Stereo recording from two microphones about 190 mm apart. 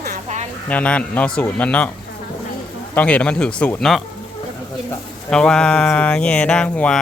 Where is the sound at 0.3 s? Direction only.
40° right (ahead or behind).